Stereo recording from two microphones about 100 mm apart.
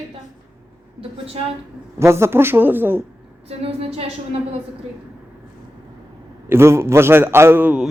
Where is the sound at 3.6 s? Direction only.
80° right.